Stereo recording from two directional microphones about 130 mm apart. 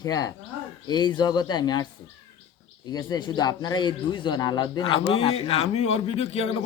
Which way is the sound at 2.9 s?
30° left (ahead or behind).